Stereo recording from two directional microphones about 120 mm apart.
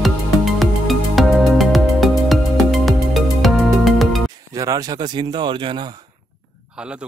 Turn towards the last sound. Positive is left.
turn(degrees=-10)  # may be behind; listen again after turning